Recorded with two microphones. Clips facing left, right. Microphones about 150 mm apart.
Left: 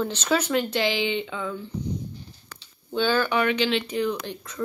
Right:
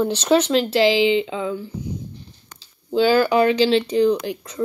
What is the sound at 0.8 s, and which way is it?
Speech, 90° right.